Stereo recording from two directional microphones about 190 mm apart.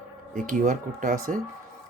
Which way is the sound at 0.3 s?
45° right (ahead or behind).